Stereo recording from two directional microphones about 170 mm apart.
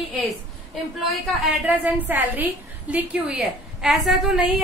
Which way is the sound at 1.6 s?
10° right (ahead or behind).